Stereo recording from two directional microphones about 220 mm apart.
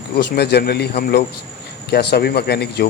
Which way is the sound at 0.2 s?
45° left (ahead or behind).